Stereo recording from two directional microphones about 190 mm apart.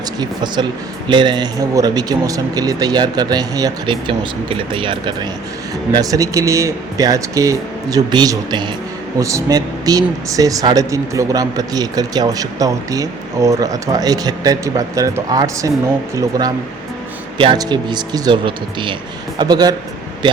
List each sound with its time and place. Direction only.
0.2 s speech: 25° right (ahead or behind)
17.3 s speech: 25° right (ahead or behind)